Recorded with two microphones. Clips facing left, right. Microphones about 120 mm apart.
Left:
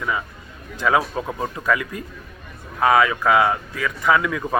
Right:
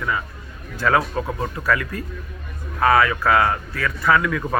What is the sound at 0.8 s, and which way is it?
Speech, 15° left (ahead or behind).